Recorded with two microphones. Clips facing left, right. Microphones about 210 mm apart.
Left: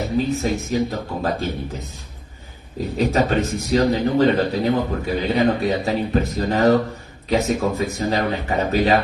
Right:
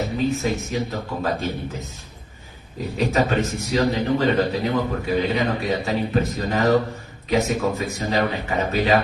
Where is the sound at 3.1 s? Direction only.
35° left (ahead or behind).